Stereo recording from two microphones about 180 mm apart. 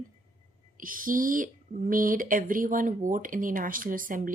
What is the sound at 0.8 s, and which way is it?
Speech, 50° right (ahead or behind).